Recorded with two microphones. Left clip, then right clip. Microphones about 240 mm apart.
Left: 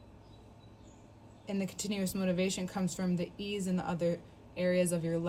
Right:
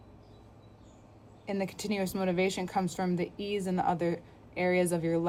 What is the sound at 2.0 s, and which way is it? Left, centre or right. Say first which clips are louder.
Speech: right 6 dB; right.